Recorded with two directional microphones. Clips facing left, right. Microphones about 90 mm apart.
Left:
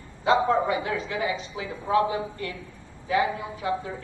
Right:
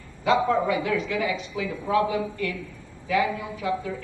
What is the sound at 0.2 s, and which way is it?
A woman's voice, 30° left (ahead or behind).